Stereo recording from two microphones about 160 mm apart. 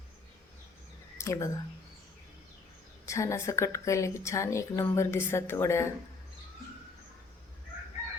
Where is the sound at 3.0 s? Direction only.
20° left (ahead or behind).